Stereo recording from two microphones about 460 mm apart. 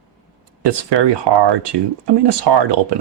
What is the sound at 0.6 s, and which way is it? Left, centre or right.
Speech, right.